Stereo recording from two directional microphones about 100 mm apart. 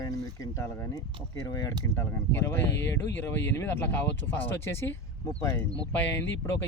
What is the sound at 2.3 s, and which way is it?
Speech, 20° left (ahead or behind).